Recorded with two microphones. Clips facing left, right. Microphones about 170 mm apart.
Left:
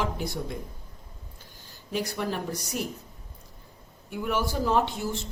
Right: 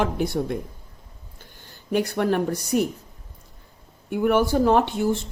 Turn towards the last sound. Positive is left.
turn(degrees=-60)  # may be behind; listen again after turning